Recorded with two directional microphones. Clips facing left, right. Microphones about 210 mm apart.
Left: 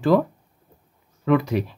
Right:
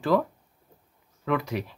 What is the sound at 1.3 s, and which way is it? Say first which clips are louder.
Speech: left 8 dB; 30° left (ahead or behind).